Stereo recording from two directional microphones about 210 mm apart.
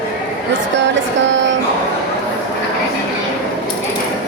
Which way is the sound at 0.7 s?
60° right (ahead or behind).